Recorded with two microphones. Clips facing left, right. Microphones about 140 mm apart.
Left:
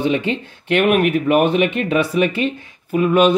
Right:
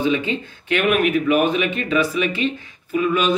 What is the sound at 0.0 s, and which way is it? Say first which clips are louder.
Speech: left 2 dB; 65° left (ahead or behind).